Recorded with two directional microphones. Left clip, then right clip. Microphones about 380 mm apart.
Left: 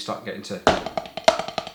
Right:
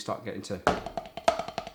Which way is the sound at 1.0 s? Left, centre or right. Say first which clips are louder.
Left 7 dB; centre.